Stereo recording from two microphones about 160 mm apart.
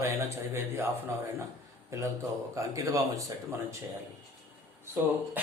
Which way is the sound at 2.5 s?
20° right (ahead or behind).